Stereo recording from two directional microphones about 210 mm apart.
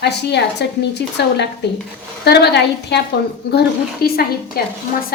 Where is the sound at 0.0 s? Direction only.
55° left (ahead or behind).